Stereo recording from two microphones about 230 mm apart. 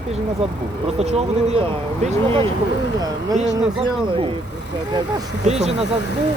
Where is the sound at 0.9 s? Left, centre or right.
Right.